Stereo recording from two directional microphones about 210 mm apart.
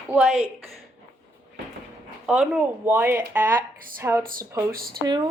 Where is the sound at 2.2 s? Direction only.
5° right (ahead or behind).